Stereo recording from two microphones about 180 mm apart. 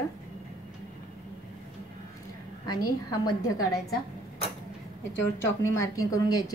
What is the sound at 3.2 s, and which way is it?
Speech, 20° left (ahead or behind).